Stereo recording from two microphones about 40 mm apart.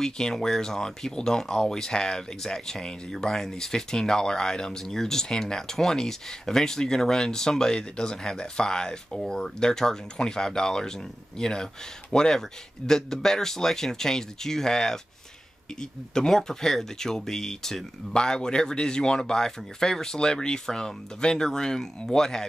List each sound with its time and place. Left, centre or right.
0.0 s speech: centre